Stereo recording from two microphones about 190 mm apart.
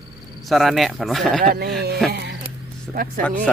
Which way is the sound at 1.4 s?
50° right (ahead or behind).